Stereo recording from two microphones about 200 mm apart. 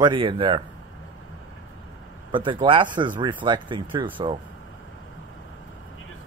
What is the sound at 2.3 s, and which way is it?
Speech, 25° right (ahead or behind).